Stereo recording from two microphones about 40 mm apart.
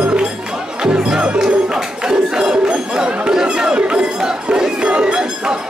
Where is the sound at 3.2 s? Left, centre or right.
Centre.